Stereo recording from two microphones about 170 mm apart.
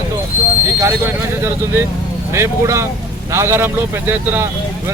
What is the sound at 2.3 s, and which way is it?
Speech, 15° right (ahead or behind).